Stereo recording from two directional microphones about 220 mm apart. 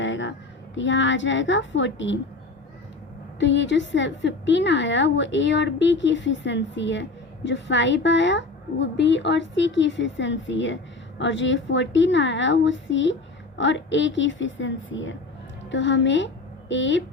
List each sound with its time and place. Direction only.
0.0 s a sound: 55° left (ahead or behind)
0.8 s a woman's voice: 55° left (ahead or behind)
3.4 s a woman's voice: 55° left (ahead or behind)